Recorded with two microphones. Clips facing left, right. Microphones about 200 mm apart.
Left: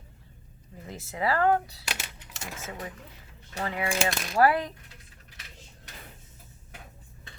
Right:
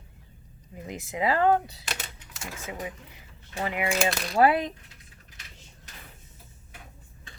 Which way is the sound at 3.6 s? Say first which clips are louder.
Right 2 dB; 15° right (ahead or behind).